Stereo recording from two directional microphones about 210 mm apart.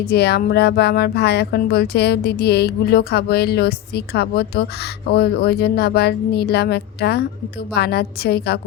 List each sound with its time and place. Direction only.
0.1 s speech: 50° left (ahead or behind)